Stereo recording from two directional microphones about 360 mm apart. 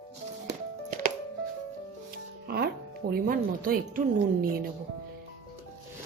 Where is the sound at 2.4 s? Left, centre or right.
Right.